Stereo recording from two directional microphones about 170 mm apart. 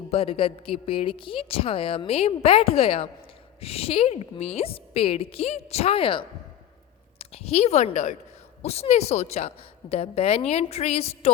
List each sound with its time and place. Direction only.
0.1 s a woman's voice: 35° left (ahead or behind)